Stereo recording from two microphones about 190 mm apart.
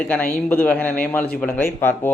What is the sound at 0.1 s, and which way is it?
Speech, 10° left (ahead or behind).